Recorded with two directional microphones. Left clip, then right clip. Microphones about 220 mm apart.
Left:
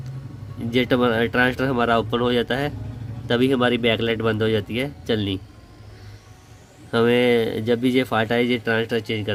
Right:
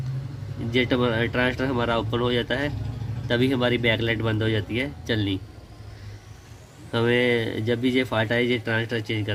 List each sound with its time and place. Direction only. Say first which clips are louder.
0.7 s speech: left 3 dB; 50° left (ahead or behind)
6.9 s speech: left 4 dB; 50° left (ahead or behind)